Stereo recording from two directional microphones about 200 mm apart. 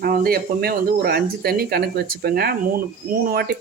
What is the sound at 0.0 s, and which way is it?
Speech, 50° right (ahead or behind).